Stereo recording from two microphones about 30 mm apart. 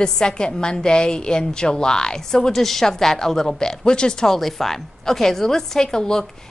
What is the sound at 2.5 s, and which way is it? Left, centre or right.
A woman's voice, centre.